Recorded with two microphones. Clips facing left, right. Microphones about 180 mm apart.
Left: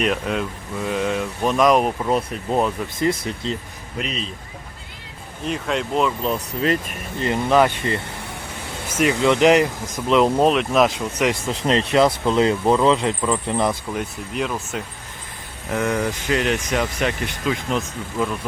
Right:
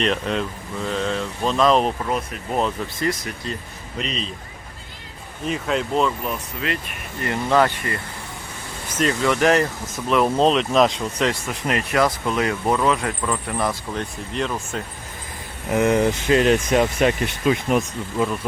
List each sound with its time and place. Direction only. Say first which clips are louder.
0.0 s speech: even; 5° left (ahead or behind)
2.0 s speech: left 4 dB; 25° left (ahead or behind)
3.9 s speech: even; 5° left (ahead or behind)
5.5 s speech: right 1 dB; centre (ahead or behind)
6.2 s speech: left 5 dB; 40° left (ahead or behind)
7.2 s speech: left 2 dB; 20° left (ahead or behind)
8.9 s speech: left 3 dB; 10° left (ahead or behind)
10.4 s speech: even; 5° left (ahead or behind)
11.3 s speech: left 3 dB; 25° left (ahead or behind)
13.9 s speech: left 1 dB; 5° left (ahead or behind)
15.7 s speech: right 4 dB; 20° right (ahead or behind)